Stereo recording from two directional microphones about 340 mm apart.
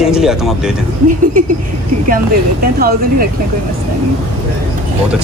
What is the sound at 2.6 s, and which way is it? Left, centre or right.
Speech, right.